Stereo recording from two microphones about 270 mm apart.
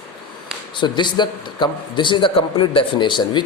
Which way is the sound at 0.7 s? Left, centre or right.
Centre.